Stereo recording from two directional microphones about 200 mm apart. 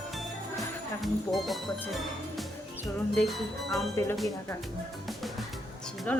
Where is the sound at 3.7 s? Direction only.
15° left (ahead or behind).